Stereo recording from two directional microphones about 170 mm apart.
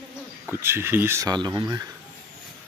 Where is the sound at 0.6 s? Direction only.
15° right (ahead or behind).